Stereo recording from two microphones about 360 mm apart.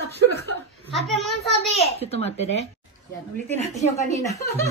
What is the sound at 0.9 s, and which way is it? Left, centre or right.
Speech, centre.